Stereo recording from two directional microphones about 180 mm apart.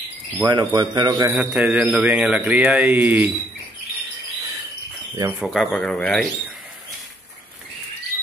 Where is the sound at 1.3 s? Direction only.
5° right (ahead or behind).